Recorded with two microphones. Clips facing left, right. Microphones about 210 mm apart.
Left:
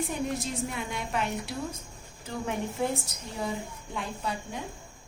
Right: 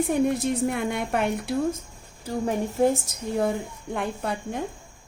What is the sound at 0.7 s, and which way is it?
Speech, 55° right (ahead or behind).